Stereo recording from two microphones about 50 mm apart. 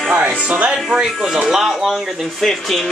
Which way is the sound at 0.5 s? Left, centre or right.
Right.